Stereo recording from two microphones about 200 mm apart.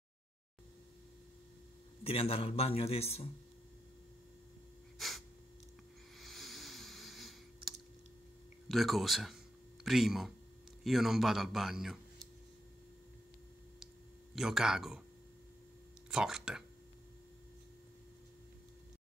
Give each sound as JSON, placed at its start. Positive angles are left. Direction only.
{"t": 2.0, "sound": "a man's voice", "side_deg": 30}
{"t": 4.9, "sound": "sneeze", "side_deg": 0}
{"t": 6.1, "sound": "clicking", "side_deg": 0}
{"t": 8.6, "sound": "a man's voice", "side_deg": 0}
{"t": 14.3, "sound": "a man's voice", "side_deg": 0}
{"t": 16.1, "sound": "a man's voice", "side_deg": 0}